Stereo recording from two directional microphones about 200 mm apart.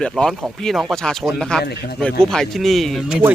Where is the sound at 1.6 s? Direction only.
55° left (ahead or behind).